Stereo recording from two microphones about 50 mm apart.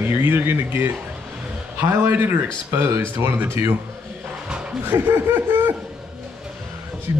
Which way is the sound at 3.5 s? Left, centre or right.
Right.